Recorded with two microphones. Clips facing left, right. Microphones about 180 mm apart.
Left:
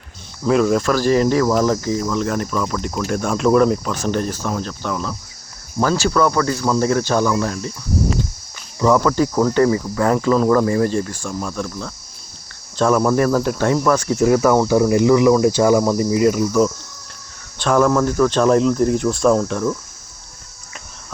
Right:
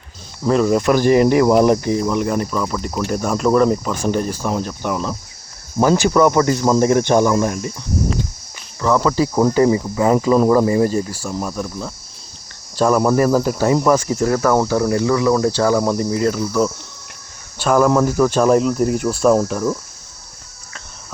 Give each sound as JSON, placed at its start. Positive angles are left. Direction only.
{"t": 0.4, "sound": "speech", "side_deg": 0}
{"t": 0.8, "sound": "speech", "side_deg": -15}
{"t": 9.0, "sound": "speech", "side_deg": -10}
{"t": 14.2, "sound": "speech", "side_deg": 10}
{"t": 17.6, "sound": "speech", "side_deg": -5}